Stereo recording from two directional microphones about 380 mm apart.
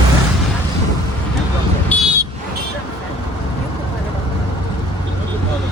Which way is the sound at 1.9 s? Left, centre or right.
Centre.